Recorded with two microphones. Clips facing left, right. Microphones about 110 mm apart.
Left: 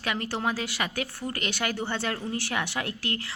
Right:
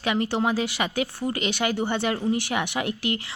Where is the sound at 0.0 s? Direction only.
15° right (ahead or behind).